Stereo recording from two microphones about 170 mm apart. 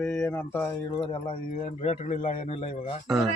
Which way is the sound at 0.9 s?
30° left (ahead or behind).